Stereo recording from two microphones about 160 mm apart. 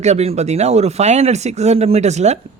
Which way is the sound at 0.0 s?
45° right (ahead or behind).